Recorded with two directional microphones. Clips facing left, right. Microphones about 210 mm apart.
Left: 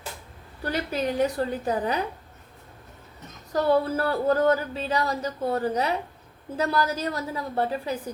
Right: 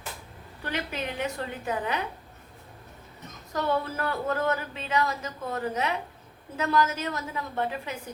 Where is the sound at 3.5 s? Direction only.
35° left (ahead or behind).